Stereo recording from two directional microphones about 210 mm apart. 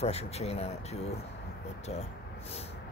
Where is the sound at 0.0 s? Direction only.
30° left (ahead or behind).